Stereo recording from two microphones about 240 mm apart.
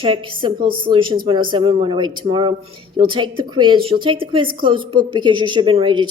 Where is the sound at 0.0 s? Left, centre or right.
Right.